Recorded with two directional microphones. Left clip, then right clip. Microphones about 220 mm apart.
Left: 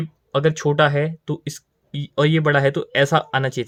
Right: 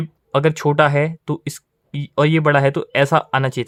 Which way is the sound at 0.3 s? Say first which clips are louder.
Right 2 dB; 30° right (ahead or behind).